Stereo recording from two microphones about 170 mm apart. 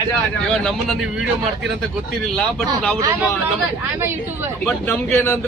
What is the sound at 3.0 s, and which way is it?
Speech, 15° right (ahead or behind).